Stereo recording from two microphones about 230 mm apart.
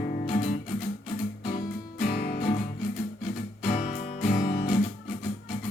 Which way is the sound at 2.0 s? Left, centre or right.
Left.